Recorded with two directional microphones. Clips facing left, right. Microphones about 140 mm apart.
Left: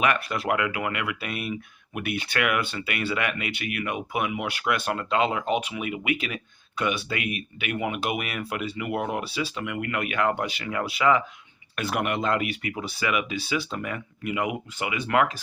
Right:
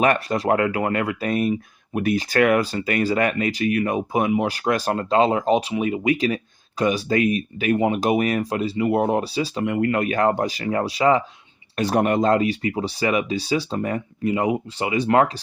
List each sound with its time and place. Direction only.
0.0 s speech: 40° right (ahead or behind)